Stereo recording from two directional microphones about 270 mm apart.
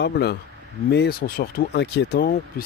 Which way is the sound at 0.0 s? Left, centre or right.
Left.